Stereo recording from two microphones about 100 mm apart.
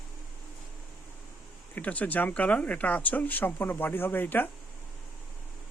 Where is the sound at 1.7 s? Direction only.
15° left (ahead or behind).